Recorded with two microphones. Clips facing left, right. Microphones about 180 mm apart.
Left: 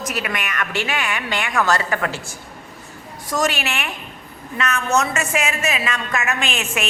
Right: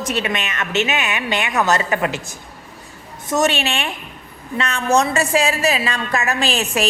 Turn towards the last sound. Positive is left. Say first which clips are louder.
# right 5 dB
turn(degrees=-35)  # may be behind; listen again after turning